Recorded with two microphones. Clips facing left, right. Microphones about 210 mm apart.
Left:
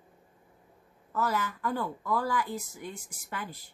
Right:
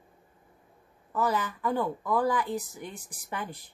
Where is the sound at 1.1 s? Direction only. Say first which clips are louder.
Right 2 dB; 15° right (ahead or behind).